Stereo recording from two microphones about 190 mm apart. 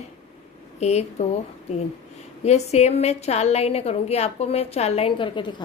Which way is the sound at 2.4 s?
35° left (ahead or behind).